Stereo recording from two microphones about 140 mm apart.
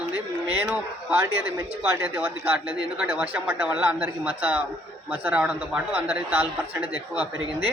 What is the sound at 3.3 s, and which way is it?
Speech, 15° right (ahead or behind).